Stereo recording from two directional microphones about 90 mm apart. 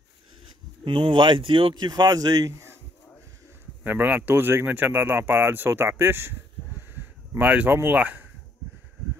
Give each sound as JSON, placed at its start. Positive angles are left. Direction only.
{"t": 0.8, "sound": "speech", "side_deg": -70}
{"t": 3.8, "sound": "speech", "side_deg": -20}